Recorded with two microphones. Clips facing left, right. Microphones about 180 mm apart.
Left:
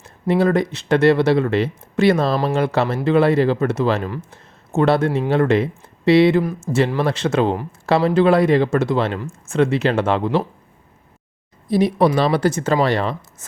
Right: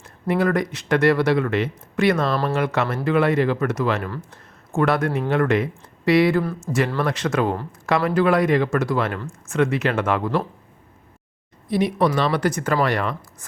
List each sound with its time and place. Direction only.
0.0 s speech: 25° left (ahead or behind)
2.3 s speech: 10° left (ahead or behind)
2.6 s speech: 30° left (ahead or behind)
6.4 s speech: 10° left (ahead or behind)
7.0 s speech: 30° left (ahead or behind)
11.7 s speech: 35° left (ahead or behind)